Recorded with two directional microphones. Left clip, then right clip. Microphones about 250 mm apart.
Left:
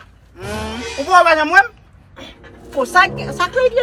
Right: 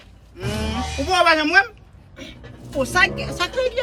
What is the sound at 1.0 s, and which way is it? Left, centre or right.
Speech, left.